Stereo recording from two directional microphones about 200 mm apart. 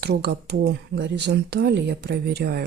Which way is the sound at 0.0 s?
55° right (ahead or behind).